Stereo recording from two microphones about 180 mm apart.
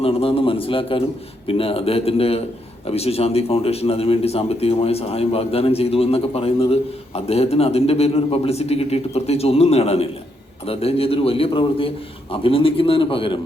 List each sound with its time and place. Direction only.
0.0 s speech: 30° left (ahead or behind)